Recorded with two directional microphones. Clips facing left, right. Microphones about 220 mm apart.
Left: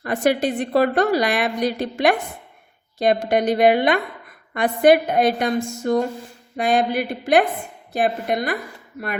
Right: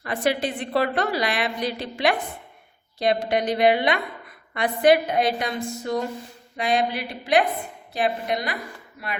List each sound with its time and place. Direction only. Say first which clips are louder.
0.0 s a woman's voice: left 5 dB; 45° left (ahead or behind)